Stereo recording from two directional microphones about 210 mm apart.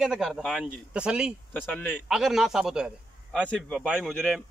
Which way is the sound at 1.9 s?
5° right (ahead or behind).